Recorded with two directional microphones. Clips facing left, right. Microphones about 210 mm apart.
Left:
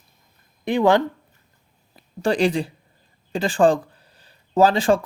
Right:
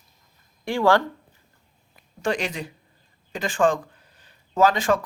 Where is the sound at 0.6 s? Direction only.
20° left (ahead or behind).